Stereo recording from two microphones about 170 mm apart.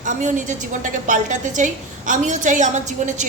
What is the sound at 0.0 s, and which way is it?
A woman's voice, 45° right (ahead or behind).